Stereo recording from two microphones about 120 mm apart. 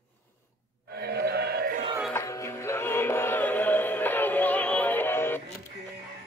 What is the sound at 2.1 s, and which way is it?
Music, 25° left (ahead or behind).